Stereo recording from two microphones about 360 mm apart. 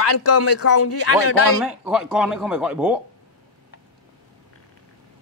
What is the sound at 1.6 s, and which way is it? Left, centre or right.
Speech, centre.